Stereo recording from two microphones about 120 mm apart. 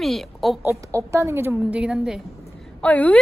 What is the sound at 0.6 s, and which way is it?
A woman's voice, 25° right (ahead or behind).